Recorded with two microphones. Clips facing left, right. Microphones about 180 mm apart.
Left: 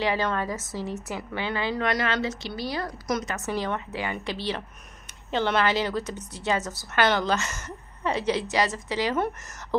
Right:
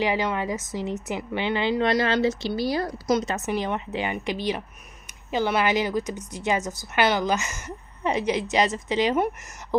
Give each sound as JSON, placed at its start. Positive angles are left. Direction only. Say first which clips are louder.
{"t": 0.0, "sound": "a woman's voice", "louder": "right 1 dB", "side_deg": -15}